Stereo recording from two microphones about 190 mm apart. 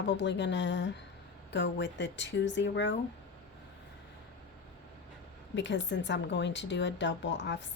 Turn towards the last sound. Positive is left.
turn(degrees=70)  # may be behind; listen again after turning